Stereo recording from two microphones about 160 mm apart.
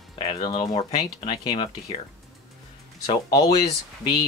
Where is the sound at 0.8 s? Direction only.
40° left (ahead or behind).